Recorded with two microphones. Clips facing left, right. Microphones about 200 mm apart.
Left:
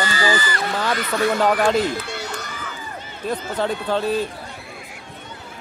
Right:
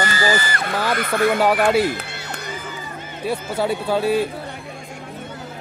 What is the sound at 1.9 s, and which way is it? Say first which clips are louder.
Run: left 3 dB; 60° right (ahead or behind).